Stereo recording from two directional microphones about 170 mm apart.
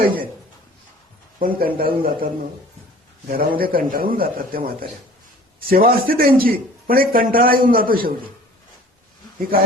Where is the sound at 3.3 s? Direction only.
60° right (ahead or behind).